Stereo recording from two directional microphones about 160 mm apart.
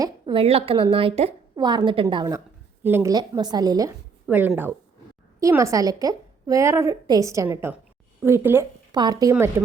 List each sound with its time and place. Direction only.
0.0 s a woman's voice: 30° right (ahead or behind)
2.8 s a woman's voice: 15° right (ahead or behind)
4.3 s a woman's voice: 10° right (ahead or behind)
8.9 s a woman's voice: 25° right (ahead or behind)